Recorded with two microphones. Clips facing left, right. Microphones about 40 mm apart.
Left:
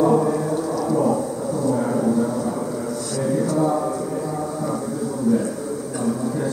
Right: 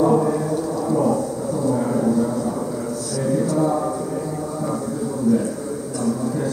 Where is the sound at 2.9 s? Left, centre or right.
Left.